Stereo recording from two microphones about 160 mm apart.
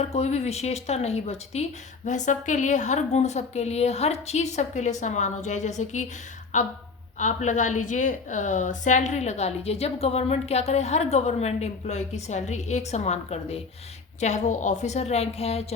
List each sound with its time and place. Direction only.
0.0 s a woman's voice: 45° left (ahead or behind)
7.2 s a woman's voice: 50° left (ahead or behind)